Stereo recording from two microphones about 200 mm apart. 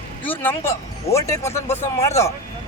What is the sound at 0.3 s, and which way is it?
Speech, 10° left (ahead or behind).